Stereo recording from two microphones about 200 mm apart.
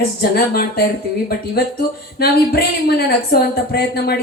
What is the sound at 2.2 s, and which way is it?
A woman's voice, 50° left (ahead or behind).